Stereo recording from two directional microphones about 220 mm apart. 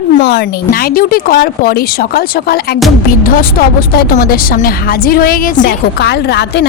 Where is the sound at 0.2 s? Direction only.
50° left (ahead or behind).